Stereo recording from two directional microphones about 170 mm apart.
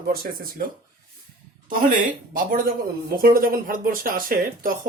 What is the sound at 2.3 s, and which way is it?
Speech, 55° right (ahead or behind).